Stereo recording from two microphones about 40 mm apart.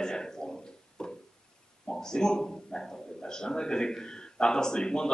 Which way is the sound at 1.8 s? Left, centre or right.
Centre.